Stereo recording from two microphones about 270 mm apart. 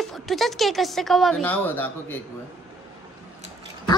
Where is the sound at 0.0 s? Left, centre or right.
Centre.